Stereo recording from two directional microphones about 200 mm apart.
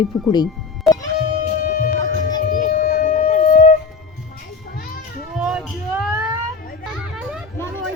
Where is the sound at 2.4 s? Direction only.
45° left (ahead or behind).